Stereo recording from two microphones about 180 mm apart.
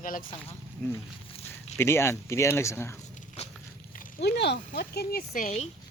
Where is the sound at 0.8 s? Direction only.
5° left (ahead or behind).